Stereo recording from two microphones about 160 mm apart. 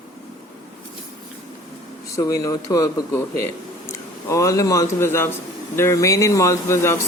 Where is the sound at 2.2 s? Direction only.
20° left (ahead or behind).